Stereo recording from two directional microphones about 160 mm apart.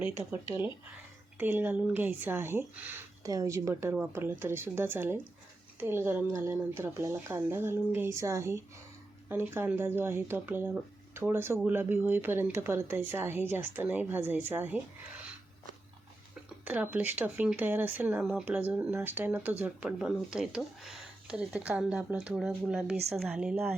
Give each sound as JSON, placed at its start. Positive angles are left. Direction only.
{"t": 0.0, "sound": "speech", "side_deg": -15}
{"t": 16.6, "sound": "a woman's voice", "side_deg": -10}